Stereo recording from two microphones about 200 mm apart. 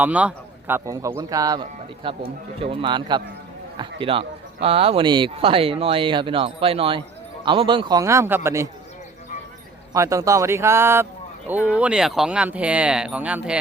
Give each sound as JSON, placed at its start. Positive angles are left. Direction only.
{"t": 0.0, "sound": "a man's voice", "side_deg": -5}
{"t": 9.9, "sound": "a man's voice", "side_deg": -15}